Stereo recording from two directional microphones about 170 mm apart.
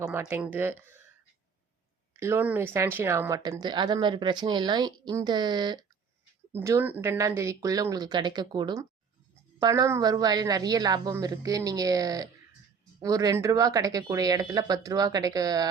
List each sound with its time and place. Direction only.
0.0 s speech: 15° right (ahead or behind)
2.1 s speech: 15° right (ahead or behind)
6.5 s speech: 15° right (ahead or behind)